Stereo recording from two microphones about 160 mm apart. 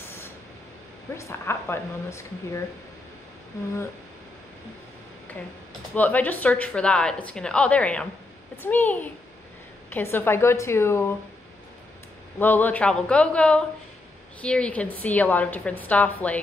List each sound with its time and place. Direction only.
1.1 s a woman's voice: 15° left (ahead or behind)
5.9 s a woman's voice: 10° left (ahead or behind)
12.4 s a woman's voice: 10° left (ahead or behind)